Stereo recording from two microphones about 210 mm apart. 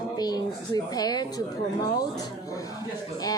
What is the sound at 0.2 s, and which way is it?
Speech, 20° left (ahead or behind).